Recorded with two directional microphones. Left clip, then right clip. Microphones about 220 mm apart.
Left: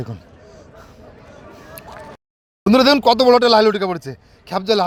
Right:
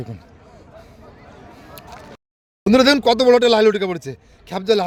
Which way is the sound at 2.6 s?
5° left (ahead or behind).